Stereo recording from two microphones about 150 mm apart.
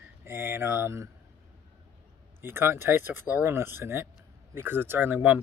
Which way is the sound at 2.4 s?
15° right (ahead or behind).